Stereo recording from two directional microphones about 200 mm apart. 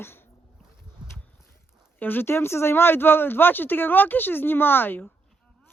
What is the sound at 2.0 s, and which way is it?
Speech, 10° left (ahead or behind).